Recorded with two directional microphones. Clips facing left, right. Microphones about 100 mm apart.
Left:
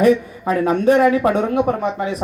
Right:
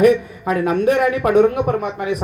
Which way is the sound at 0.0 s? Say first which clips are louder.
Right 1 dB; 30° left (ahead or behind).